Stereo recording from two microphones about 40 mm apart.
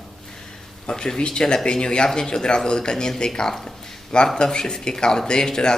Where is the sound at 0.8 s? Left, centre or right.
Left.